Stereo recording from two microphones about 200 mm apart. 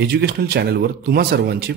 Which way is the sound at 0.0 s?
50° right (ahead or behind).